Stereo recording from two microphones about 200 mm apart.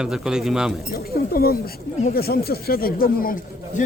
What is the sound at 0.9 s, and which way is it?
Speech, 50° left (ahead or behind).